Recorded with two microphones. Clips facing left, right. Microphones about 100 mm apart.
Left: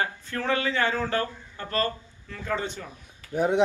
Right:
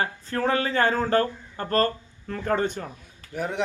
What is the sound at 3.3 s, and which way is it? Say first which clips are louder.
Speech: left 6 dB; 20° left (ahead or behind).